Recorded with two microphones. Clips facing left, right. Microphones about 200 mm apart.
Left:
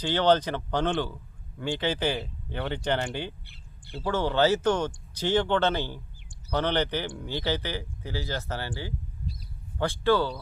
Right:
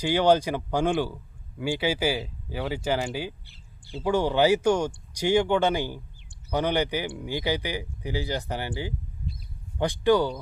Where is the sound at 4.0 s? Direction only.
15° right (ahead or behind).